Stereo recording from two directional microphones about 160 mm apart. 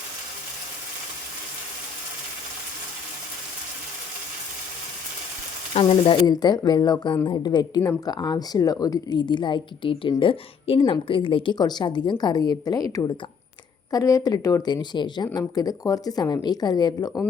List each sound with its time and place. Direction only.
5.7 s speech: 30° left (ahead or behind)